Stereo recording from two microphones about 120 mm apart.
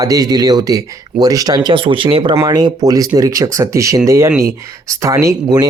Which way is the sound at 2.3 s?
30° right (ahead or behind).